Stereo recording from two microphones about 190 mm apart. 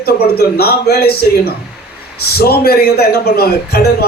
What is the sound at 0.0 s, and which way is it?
A man's voice, 55° left (ahead or behind).